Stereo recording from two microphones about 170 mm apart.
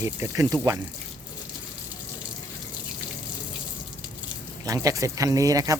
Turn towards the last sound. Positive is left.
turn(degrees=-20)  # may be behind; listen again after turning